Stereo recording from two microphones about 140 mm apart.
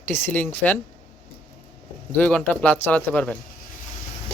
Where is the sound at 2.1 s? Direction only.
10° left (ahead or behind).